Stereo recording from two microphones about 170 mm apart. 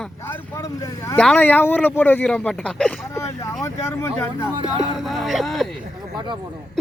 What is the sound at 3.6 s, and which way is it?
Speech, 15° left (ahead or behind).